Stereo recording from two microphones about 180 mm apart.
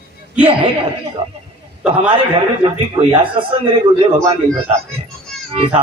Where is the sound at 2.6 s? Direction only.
30° right (ahead or behind).